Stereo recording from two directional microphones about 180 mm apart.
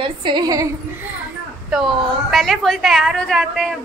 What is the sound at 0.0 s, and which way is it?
Speech, 25° right (ahead or behind).